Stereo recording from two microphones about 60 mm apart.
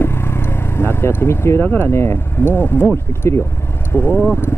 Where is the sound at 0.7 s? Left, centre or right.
Left.